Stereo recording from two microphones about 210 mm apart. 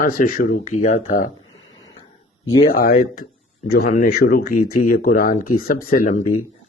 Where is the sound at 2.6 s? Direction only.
45° left (ahead or behind).